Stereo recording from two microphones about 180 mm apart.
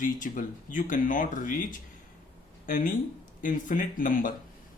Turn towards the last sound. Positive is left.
turn(degrees=50)  # may be behind; listen again after turning